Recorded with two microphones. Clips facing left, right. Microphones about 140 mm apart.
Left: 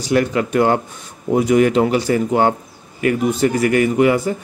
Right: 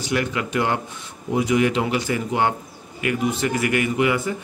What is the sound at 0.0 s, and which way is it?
Speech, 40° left (ahead or behind).